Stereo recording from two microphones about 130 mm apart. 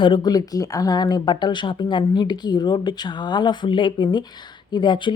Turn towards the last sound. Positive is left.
turn(degrees=35)  # may be behind; listen again after turning